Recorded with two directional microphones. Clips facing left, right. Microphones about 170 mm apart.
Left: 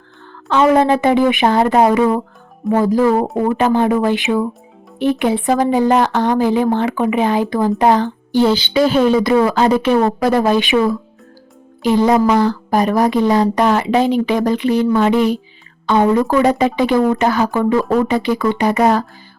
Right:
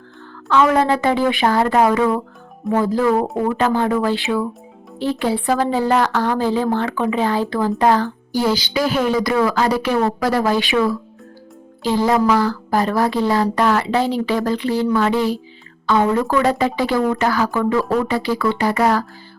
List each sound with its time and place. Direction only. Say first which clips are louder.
0.4 s speech: left 3 dB; 20° left (ahead or behind)